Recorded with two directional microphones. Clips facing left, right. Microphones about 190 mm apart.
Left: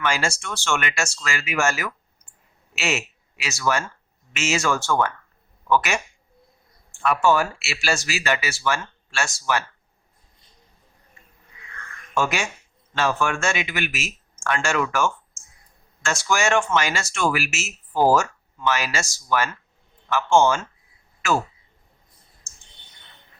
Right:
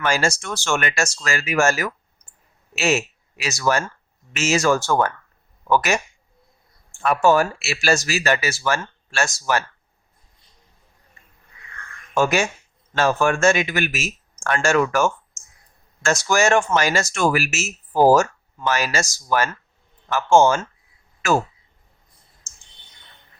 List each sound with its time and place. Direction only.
0.0 s speech: 40° right (ahead or behind)
7.0 s speech: 40° right (ahead or behind)
12.1 s speech: 40° right (ahead or behind)